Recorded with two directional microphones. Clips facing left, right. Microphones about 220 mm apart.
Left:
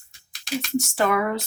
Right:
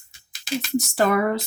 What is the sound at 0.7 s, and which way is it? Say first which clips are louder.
Speech: right 2 dB; 35° right (ahead or behind).